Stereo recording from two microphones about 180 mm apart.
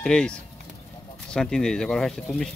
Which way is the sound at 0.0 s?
5° left (ahead or behind).